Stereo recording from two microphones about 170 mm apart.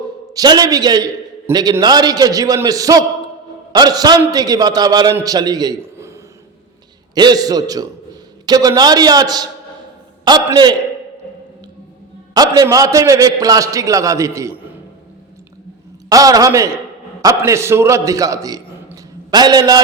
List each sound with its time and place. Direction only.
0.3 s a man's voice: 25° right (ahead or behind)
12.3 s a man's voice: 20° right (ahead or behind)
16.0 s a man's voice: 20° right (ahead or behind)